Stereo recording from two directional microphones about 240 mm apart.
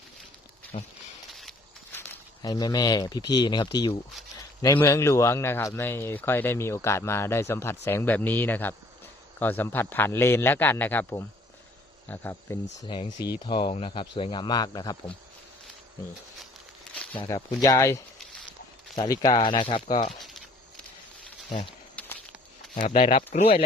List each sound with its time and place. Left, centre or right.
0.7 s speech: left
1.3 s walk: centre
2.0 s speech: centre
12.9 s speech: left
17.2 s speech: centre
20.1 s a sound: centre
21.5 s speech: left
22.0 s walk: centre
22.8 s speech: left